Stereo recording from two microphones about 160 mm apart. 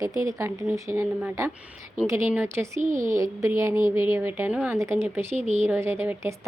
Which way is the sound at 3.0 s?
20° right (ahead or behind).